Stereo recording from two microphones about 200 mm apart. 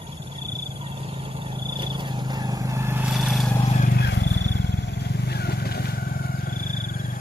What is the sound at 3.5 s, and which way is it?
Vehicle, 35° left (ahead or behind).